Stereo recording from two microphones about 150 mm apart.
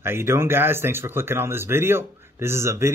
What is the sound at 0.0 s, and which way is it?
Speech, 15° right (ahead or behind).